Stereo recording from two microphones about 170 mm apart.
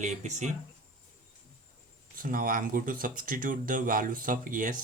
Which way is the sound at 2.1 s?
55° right (ahead or behind).